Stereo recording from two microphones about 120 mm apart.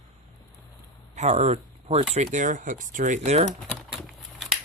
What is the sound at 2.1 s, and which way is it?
Speech, 90° right.